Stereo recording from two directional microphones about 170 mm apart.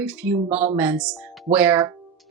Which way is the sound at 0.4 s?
40° right (ahead or behind).